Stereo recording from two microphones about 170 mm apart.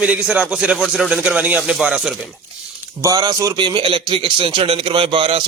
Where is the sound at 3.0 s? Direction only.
20° right (ahead or behind).